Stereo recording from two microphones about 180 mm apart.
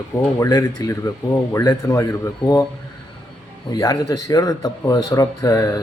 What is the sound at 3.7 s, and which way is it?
Speech, 20° left (ahead or behind).